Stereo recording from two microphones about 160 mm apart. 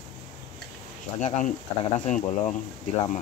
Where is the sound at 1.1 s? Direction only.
50° left (ahead or behind).